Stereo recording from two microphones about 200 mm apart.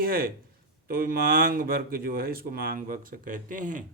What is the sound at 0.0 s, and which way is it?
Speech, 45° right (ahead or behind).